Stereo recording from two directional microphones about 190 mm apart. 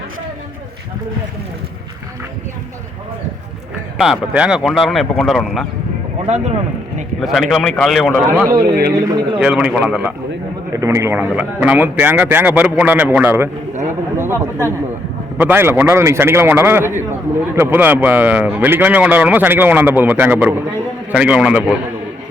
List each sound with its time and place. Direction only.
3.9 s speech: 5° right (ahead or behind)
6.2 s a man's voice: 35° right (ahead or behind)
7.2 s speech: centre (ahead or behind)
8.4 s a man's voice: 50° right (ahead or behind)
9.4 s speech: 5° right (ahead or behind)
10.7 s a man's voice: 15° right (ahead or behind)